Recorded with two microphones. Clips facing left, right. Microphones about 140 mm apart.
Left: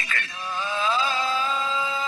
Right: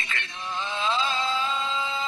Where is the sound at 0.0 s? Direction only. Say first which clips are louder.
Left 2 dB; 25° right (ahead or behind).